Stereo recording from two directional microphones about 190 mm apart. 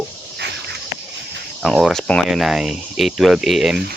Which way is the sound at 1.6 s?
Centre (ahead or behind).